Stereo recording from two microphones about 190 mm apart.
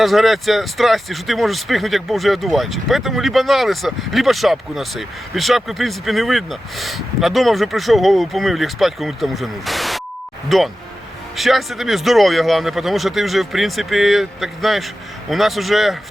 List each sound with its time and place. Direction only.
0.0 s speech: centre (ahead or behind)